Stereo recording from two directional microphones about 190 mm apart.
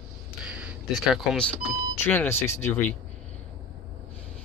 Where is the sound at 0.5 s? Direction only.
5° right (ahead or behind).